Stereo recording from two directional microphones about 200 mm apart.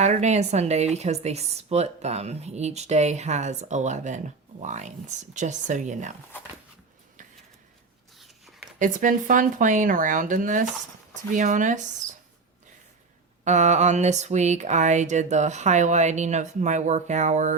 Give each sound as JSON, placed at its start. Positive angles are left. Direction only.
{"t": 0.0, "sound": "speech", "side_deg": -35}
{"t": 8.8, "sound": "speech", "side_deg": -40}
{"t": 13.4, "sound": "speech", "side_deg": -35}